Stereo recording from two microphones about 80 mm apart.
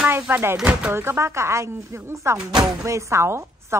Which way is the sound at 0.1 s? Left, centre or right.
Right.